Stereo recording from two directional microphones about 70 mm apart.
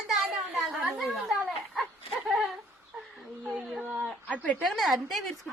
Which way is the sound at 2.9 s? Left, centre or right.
Centre.